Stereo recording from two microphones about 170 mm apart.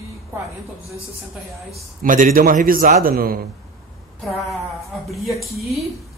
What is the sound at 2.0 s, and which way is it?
A man's voice, 50° right (ahead or behind).